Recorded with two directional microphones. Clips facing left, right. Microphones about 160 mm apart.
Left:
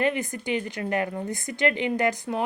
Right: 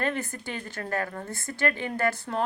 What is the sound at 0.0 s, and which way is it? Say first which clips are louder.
A woman's voice: left 4 dB; 15° left (ahead or behind).